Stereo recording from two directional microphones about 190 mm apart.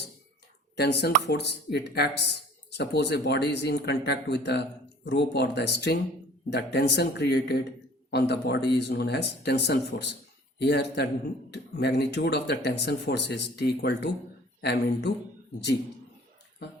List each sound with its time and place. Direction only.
0.8 s speech: 60° left (ahead or behind)